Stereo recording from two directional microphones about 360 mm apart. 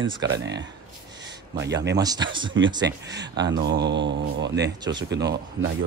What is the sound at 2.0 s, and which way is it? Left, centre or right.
Speech, centre.